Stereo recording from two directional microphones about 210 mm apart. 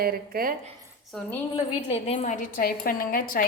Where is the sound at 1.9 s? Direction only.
30° left (ahead or behind).